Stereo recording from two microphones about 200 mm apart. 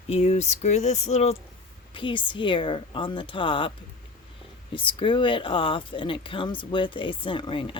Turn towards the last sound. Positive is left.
turn(degrees=25)  # may be behind; listen again after turning